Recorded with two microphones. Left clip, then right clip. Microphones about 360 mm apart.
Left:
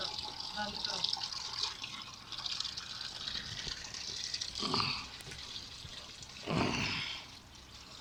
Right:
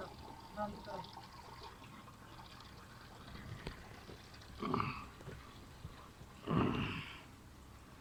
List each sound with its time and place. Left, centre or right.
0.1 s water: left
4.7 s dog: centre
6.4 s roaring cats: centre